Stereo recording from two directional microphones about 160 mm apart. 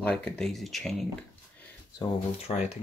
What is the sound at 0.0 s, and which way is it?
Speech, 5° left (ahead or behind).